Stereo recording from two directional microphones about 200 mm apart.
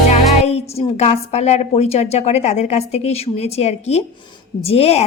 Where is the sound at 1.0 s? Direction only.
35° left (ahead or behind).